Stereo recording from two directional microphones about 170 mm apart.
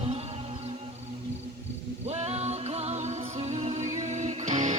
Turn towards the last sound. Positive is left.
turn(degrees=-45)  # may be behind; listen again after turning